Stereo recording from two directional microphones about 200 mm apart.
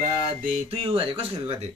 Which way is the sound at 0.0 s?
40° right (ahead or behind).